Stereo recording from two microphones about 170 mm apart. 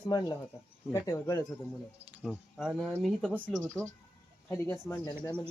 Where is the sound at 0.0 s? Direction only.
25° left (ahead or behind).